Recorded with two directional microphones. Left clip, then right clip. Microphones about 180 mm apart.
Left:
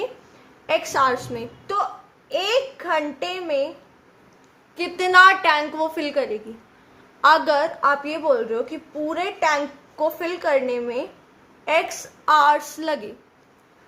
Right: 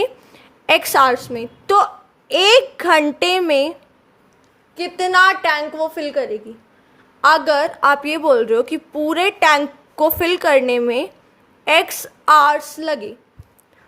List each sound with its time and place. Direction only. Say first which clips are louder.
0.7 s a woman's voice: right 7 dB; 50° right (ahead or behind)
1.6 s a woman's voice: right 10 dB; 65° right (ahead or behind)
4.7 s a woman's voice: even; 30° right (ahead or behind)
7.2 s a woman's voice: right 3 dB; 35° right (ahead or behind)
7.8 s a woman's voice: right 5 dB; 50° right (ahead or behind); by 13.1 s 30° right (ahead or behind)